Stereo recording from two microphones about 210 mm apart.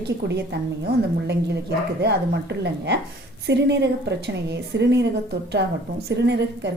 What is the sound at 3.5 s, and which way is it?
A woman's voice, 55° right (ahead or behind).